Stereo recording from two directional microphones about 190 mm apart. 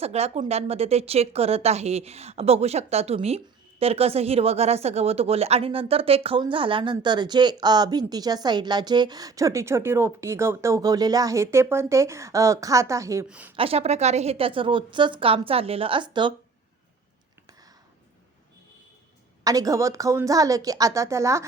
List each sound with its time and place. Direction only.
0.0 s a woman's voice: 35° right (ahead or behind); by 13.5 s 5° right (ahead or behind)
13.6 s a woman's voice: 30° right (ahead or behind)
19.5 s a woman's voice: 20° right (ahead or behind)